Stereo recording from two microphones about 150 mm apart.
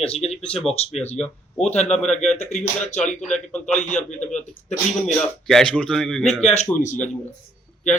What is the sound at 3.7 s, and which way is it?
Speech, 50° left (ahead or behind).